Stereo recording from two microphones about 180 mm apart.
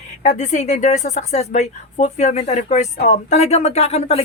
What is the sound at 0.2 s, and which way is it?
A woman's voice, 40° left (ahead or behind).